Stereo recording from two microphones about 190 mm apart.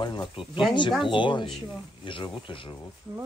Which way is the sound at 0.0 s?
25° left (ahead or behind).